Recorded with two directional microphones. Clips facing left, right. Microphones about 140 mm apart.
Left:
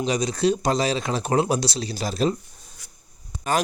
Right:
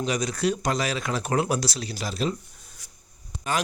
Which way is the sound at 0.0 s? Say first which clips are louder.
Left 4 dB; 25° left (ahead or behind).